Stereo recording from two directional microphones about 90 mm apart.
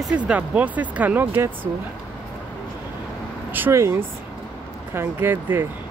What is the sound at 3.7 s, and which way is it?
Speech, 30° right (ahead or behind).